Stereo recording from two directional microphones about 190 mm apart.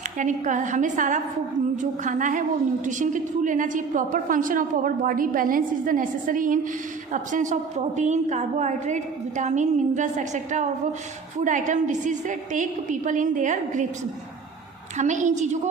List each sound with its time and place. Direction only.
0.2 s a woman's voice: 40° right (ahead or behind)
14.9 s a woman's voice: 40° right (ahead or behind)